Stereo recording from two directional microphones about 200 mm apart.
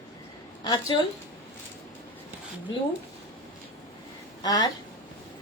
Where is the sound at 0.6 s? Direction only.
20° left (ahead or behind).